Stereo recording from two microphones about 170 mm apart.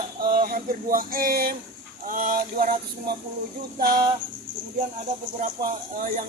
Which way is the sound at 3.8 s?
60° right (ahead or behind).